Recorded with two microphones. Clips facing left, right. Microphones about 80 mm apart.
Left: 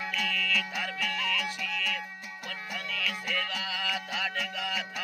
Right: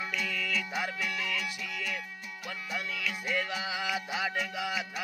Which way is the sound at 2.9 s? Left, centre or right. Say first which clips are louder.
Left 1 dB; centre.